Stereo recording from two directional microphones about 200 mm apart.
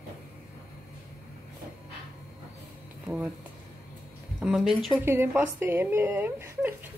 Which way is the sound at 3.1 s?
5° right (ahead or behind).